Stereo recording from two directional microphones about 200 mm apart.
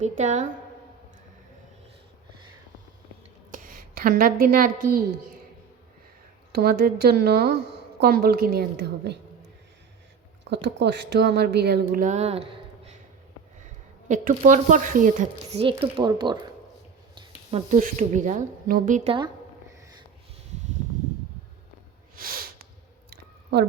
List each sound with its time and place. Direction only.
0.0 s a woman's voice: 35° right (ahead or behind)
3.5 s a woman's voice: 45° right (ahead or behind)
6.5 s a woman's voice: 50° right (ahead or behind); by 12.9 s 30° right (ahead or behind)
14.1 s a woman's voice: 40° right (ahead or behind)
15.6 s speech: 25° right (ahead or behind)
17.7 s a woman's voice: 40° right (ahead or behind)
22.1 s snort: 45° right (ahead or behind)
23.0 s a sound: 55° right (ahead or behind)